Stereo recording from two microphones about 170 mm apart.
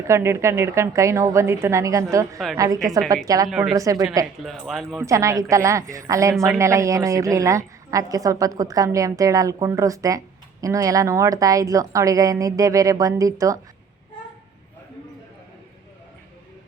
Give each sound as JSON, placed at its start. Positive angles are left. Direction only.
{"t": 0.1, "sound": "a woman's voice", "side_deg": -15}
{"t": 3.5, "sound": "speech", "side_deg": -5}
{"t": 3.8, "sound": "a woman's voice", "side_deg": -20}
{"t": 4.4, "sound": "speech", "side_deg": 0}
{"t": 4.9, "sound": "a woman's voice", "side_deg": -20}